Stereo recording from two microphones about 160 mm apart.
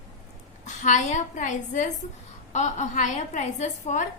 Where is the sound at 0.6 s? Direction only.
50° left (ahead or behind).